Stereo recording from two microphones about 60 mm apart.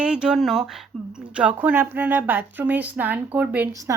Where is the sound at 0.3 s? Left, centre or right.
Centre.